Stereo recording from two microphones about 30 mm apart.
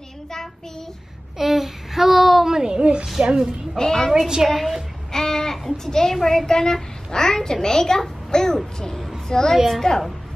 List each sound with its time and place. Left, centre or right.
0.3 s child singing: centre
1.4 s a sound: centre
2.5 s a woman's voice: right
3.2 s a woman's voice: right
3.7 s a child's voice: left
4.4 s a woman's voice: right
5.1 s a sound: centre
5.9 s a child's voice: centre